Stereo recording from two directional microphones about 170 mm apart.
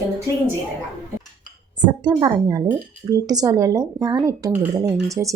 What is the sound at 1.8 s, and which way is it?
Speech, 25° right (ahead or behind).